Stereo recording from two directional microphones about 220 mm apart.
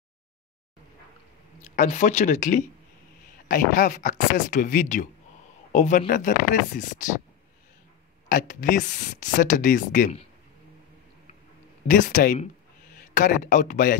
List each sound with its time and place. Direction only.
1.6 s speech: 35° left (ahead or behind)
8.3 s speech: 35° left (ahead or behind)
11.9 s a man's voice: 35° left (ahead or behind)